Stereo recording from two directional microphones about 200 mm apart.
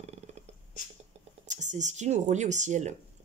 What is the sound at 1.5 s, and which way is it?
Speech, 35° right (ahead or behind).